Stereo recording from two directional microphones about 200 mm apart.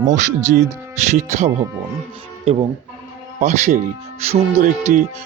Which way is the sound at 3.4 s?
35° right (ahead or behind).